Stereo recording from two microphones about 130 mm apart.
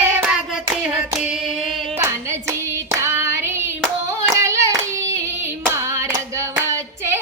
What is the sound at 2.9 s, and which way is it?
Hands, 20° right (ahead or behind).